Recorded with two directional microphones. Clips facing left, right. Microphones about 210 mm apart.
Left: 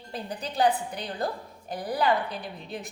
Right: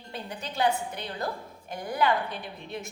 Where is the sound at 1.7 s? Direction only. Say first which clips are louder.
Left 1 dB; 35° left (ahead or behind).